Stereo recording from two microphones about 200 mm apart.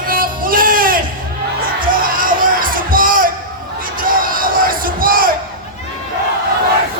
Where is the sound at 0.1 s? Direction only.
45° right (ahead or behind).